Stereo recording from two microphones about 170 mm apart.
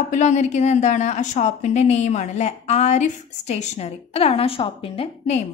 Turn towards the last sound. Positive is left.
turn(degrees=35)  # may be behind; listen again after turning